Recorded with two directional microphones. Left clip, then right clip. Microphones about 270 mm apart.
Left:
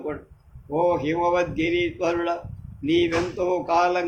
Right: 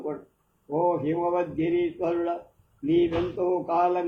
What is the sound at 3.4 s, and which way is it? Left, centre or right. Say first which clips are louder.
Speech: left 3 dB; left.